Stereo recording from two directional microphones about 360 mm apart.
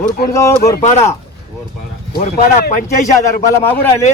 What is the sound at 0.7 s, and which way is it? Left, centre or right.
Speech, centre.